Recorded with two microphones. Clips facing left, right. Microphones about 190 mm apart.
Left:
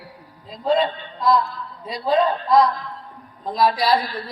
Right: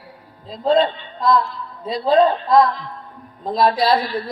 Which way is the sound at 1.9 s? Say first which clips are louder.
Right 4 dB; 25° right (ahead or behind).